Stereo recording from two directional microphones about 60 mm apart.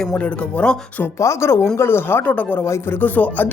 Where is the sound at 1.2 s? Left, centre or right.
Left.